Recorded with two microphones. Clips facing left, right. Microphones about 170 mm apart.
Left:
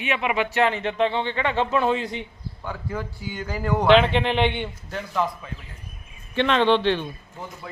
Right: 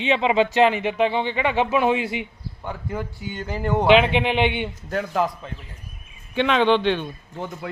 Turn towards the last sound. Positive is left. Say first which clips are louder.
# right 1 dB
turn(degrees=0)  # may be behind; listen again after turning